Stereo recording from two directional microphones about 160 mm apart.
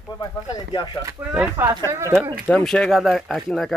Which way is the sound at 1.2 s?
15° right (ahead or behind).